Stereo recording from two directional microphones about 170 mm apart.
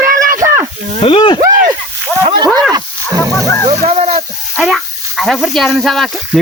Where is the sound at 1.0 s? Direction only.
30° left (ahead or behind).